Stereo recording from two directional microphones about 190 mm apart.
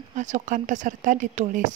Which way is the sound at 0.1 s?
40° right (ahead or behind).